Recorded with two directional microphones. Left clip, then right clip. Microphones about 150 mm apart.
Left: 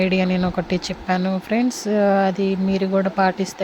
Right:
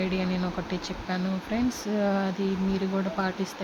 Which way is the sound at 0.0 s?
50° left (ahead or behind).